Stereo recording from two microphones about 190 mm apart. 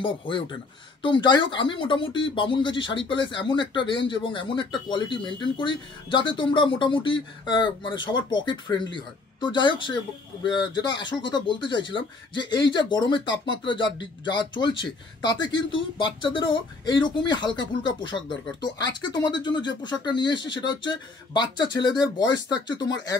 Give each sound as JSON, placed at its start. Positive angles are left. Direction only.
{"t": 0.0, "sound": "speech", "side_deg": 25}
{"t": 13.3, "sound": "speech", "side_deg": 75}
{"t": 14.5, "sound": "speech", "side_deg": 25}